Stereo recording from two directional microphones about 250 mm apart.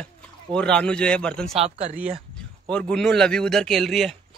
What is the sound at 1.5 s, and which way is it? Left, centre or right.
Speech, right.